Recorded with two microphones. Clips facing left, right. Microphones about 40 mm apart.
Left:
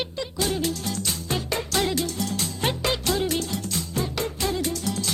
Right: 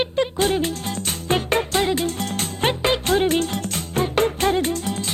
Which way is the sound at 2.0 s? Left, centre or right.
Right.